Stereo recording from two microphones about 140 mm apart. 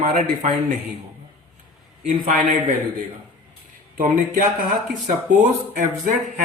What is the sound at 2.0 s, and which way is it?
Speech, 65° right (ahead or behind).